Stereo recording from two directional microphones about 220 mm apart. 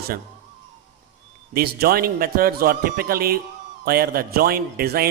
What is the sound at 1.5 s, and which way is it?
Speech, 45° right (ahead or behind).